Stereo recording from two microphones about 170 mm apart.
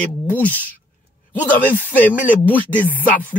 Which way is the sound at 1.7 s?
10° left (ahead or behind).